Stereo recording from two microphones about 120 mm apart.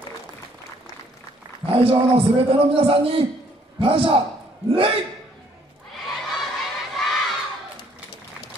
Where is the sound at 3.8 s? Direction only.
50° right (ahead or behind).